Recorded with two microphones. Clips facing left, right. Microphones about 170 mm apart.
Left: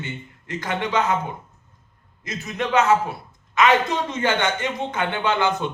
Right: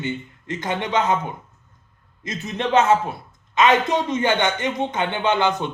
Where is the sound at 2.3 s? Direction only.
25° right (ahead or behind).